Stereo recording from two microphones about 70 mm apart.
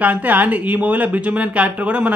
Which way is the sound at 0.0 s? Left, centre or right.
Right.